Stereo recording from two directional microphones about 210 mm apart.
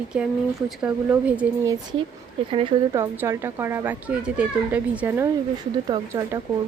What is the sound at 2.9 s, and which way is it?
Speech, 15° right (ahead or behind).